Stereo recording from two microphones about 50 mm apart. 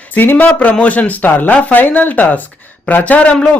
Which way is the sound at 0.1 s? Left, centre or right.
Left.